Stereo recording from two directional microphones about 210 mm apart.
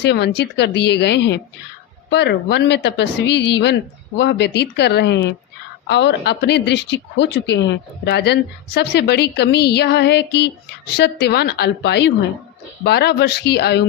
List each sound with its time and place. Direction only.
0.0 s a woman's voice: 55° left (ahead or behind)